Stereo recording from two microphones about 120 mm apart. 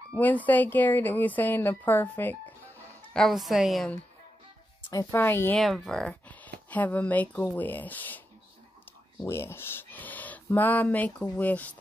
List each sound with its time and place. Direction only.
0.1 s speech: 15° left (ahead or behind)
3.1 s a woman's voice: centre (ahead or behind)
4.9 s speech: 20° left (ahead or behind)
5.6 s speech: 5° left (ahead or behind)
9.2 s speech: 20° left (ahead or behind)